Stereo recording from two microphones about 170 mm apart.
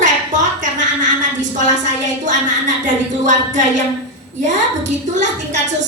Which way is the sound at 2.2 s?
45° right (ahead or behind).